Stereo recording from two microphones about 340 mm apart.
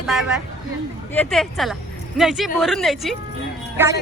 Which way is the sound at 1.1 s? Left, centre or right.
Centre.